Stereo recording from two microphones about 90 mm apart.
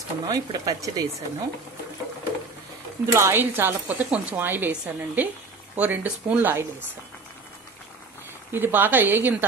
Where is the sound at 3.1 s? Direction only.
25° right (ahead or behind).